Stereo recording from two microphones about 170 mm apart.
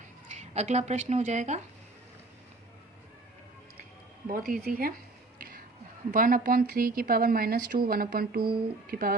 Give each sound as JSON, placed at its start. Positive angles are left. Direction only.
{"t": 0.3, "sound": "speech", "side_deg": -40}
{"t": 4.3, "sound": "speech", "side_deg": -50}
{"t": 5.4, "sound": "music", "side_deg": -55}
{"t": 6.1, "sound": "speech", "side_deg": -55}